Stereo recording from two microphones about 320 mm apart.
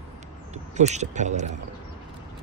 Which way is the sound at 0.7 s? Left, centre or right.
Right.